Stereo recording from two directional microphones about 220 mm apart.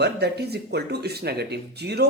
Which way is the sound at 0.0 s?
50° right (ahead or behind).